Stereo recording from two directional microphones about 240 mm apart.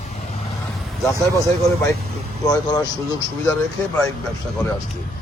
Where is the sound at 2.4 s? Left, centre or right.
Centre.